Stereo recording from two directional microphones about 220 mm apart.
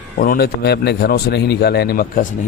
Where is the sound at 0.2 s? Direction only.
45° left (ahead or behind).